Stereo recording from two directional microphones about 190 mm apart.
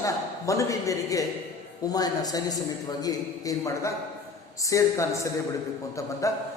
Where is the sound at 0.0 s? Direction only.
15° left (ahead or behind).